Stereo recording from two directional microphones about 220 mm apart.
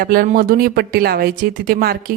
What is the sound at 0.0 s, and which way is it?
A woman's voice, 40° right (ahead or behind).